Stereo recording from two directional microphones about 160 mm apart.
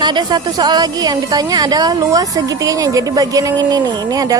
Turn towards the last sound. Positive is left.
turn(degrees=-25)  # may be behind; listen again after turning